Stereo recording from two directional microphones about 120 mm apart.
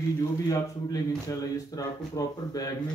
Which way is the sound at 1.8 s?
30° left (ahead or behind).